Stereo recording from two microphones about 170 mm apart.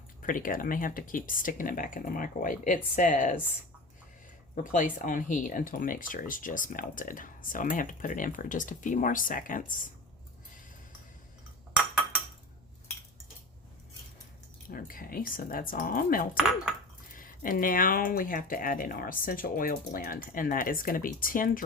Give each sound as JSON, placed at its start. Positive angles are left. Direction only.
{"t": 0.2, "sound": "speech", "side_deg": 55}
{"t": 4.5, "sound": "speech", "side_deg": 50}
{"t": 11.7, "sound": "a sound", "side_deg": -5}
{"t": 14.7, "sound": "speech", "side_deg": 55}